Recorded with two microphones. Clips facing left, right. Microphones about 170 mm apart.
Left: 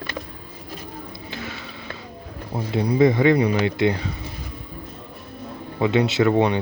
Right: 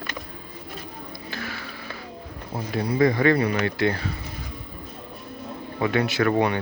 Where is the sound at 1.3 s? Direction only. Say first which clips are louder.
Left 1 dB; 20° left (ahead or behind).